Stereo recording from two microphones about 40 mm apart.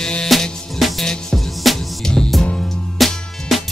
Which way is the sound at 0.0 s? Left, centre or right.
Centre.